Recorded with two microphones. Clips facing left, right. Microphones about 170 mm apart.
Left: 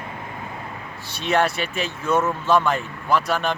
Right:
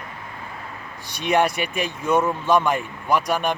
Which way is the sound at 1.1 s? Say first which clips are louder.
Right 1 dB; 15° right (ahead or behind).